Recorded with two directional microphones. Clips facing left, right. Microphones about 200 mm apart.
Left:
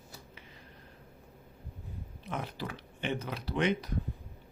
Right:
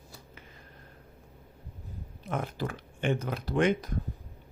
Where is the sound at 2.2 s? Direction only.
50° right (ahead or behind).